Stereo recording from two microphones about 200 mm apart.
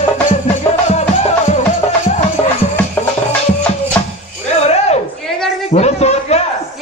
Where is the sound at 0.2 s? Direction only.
35° left (ahead or behind).